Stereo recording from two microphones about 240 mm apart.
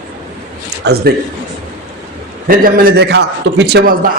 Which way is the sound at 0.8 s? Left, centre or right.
Right.